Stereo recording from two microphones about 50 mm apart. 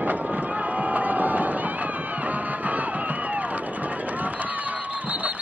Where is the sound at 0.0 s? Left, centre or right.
Right.